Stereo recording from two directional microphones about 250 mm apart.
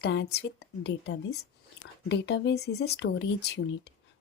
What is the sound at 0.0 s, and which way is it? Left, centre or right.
Speech, left.